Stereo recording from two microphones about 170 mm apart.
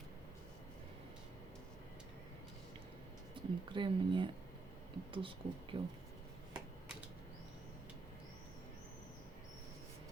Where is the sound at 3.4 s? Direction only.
30° right (ahead or behind).